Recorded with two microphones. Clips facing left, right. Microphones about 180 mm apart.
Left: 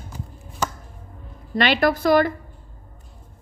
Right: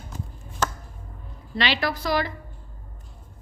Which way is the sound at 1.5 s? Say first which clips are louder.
Left 7 dB; 50° left (ahead or behind).